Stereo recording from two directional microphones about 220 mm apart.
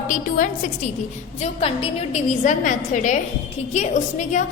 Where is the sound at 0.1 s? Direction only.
35° left (ahead or behind).